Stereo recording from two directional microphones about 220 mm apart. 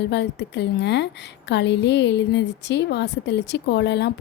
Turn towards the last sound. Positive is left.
turn(degrees=50)  # may be behind; listen again after turning